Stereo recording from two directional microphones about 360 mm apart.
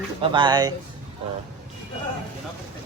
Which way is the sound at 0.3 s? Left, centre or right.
Centre.